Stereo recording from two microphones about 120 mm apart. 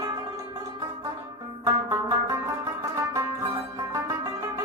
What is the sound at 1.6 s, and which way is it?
Music, 30° right (ahead or behind).